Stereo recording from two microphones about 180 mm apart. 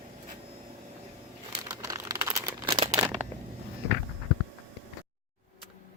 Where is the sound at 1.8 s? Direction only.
20° right (ahead or behind).